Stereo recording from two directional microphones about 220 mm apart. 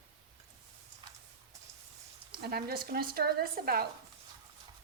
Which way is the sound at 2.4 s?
45° right (ahead or behind).